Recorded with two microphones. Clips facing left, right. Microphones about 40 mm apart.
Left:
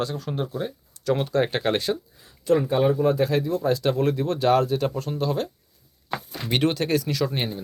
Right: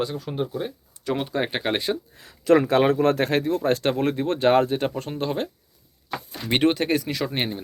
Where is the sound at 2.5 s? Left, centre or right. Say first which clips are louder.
Right 2 dB; right.